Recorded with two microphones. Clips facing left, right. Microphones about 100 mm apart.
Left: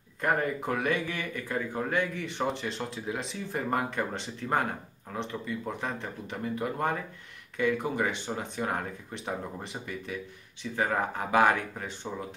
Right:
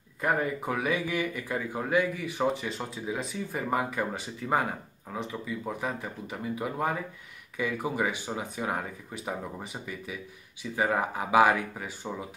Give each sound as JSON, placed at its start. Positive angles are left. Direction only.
{"t": 0.2, "sound": "speech", "side_deg": 0}